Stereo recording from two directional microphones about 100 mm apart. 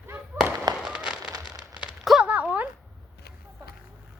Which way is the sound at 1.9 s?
5° right (ahead or behind).